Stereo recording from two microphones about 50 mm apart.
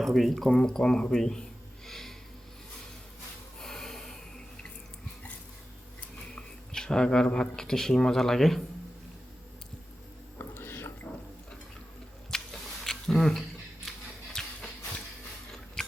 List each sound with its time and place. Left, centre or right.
0.0 s speech: centre
0.5 s speech: centre
1.9 s snort: centre
3.6 s snort: centre
6.3 s a sound: centre
7.3 s speech: centre
10.3 s whispering: left
12.3 s squish: centre
12.6 s a sound: centre